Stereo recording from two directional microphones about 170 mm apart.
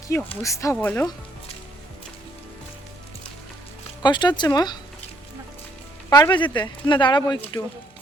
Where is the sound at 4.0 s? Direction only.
25° left (ahead or behind).